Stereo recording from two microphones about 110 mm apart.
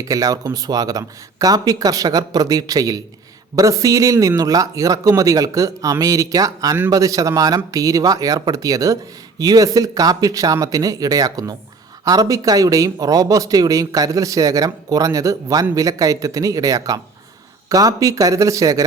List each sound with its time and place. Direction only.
0.0 s speech: 35° right (ahead or behind)